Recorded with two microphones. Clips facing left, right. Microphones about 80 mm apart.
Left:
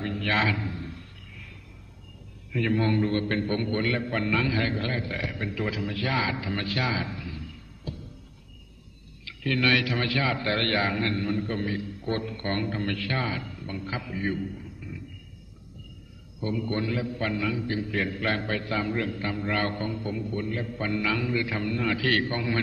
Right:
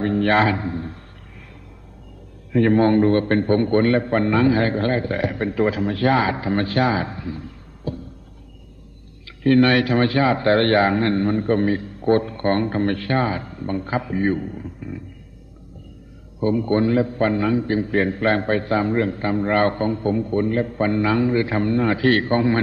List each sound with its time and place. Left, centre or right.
0.0 s a man's voice: right
2.5 s a man's voice: right
9.4 s a man's voice: right
16.3 s a man's voice: right